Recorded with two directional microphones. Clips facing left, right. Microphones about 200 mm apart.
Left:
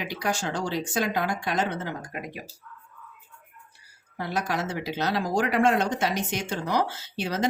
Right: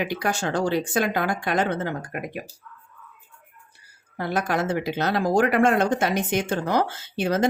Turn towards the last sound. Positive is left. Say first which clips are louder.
# right 6 dB
turn(degrees=-55)  # may be behind; listen again after turning